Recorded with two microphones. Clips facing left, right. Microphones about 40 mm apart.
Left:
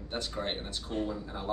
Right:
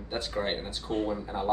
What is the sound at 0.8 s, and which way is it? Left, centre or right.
Speech, right.